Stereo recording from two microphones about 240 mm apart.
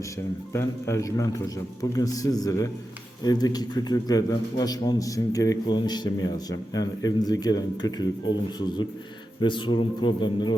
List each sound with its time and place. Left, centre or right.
0.5 s a man's voice: centre